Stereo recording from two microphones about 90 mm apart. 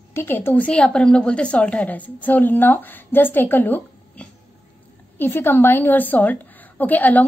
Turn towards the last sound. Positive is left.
turn(degrees=20)  # may be behind; listen again after turning